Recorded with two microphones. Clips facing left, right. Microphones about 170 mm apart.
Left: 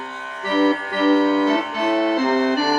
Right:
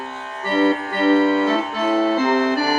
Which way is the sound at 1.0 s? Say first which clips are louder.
Even; 50° right (ahead or behind).